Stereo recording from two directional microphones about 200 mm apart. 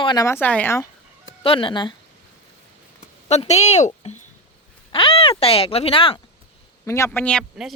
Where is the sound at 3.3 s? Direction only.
35° left (ahead or behind).